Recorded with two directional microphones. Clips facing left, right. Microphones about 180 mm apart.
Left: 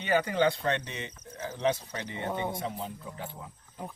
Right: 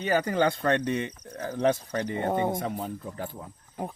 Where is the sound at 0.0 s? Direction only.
40° right (ahead or behind).